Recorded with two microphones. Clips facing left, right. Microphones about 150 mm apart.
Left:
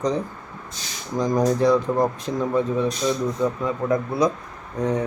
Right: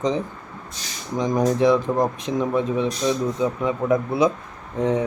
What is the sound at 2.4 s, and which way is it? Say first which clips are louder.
Speech: even; 20° right (ahead or behind).